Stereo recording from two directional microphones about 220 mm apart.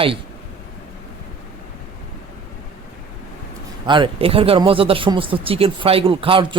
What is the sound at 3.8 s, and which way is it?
Speech, 20° right (ahead or behind).